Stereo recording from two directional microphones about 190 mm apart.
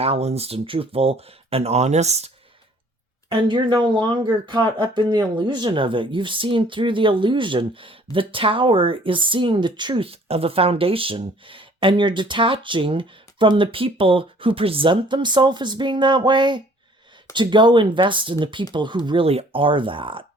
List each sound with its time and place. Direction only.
0.0 s speech: 35° right (ahead or behind)
3.2 s speech: 25° right (ahead or behind)